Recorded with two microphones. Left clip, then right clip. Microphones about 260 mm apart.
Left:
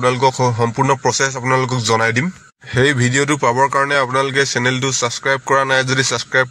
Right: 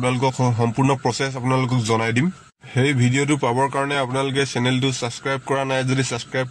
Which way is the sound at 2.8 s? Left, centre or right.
Left.